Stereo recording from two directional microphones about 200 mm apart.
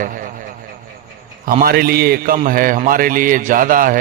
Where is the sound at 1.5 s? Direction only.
45° right (ahead or behind).